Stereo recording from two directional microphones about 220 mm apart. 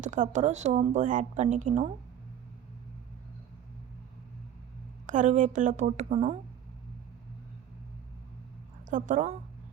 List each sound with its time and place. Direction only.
0.0 s a woman's voice: 35° right (ahead or behind)
5.0 s a woman's voice: 35° right (ahead or behind)
8.9 s a woman's voice: 35° right (ahead or behind)